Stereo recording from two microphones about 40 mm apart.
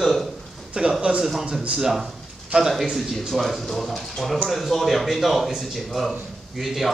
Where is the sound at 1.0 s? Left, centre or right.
Right.